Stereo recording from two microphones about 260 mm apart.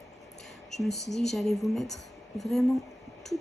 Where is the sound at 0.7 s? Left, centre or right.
Centre.